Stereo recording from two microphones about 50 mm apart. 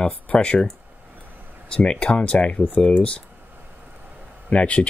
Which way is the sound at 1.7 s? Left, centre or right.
Centre.